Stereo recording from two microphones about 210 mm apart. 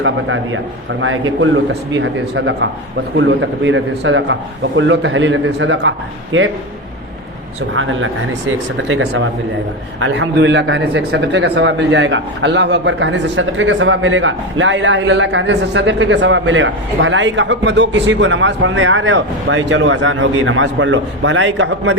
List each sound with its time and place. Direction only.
0.0 s a man's voice: 70° right (ahead or behind)
2.0 s speech: 60° right (ahead or behind)
7.7 s a man's voice: 70° right (ahead or behind)